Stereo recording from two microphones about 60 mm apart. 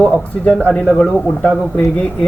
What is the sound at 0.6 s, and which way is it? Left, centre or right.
A man's voice, centre.